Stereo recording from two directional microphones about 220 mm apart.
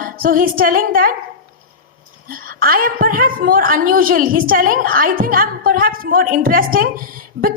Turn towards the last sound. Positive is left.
turn(degrees=-40)  # may be behind; listen again after turning